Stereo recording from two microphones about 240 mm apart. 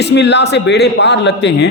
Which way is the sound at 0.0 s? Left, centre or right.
Left.